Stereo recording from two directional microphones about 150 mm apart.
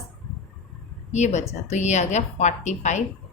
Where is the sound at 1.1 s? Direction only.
50° left (ahead or behind).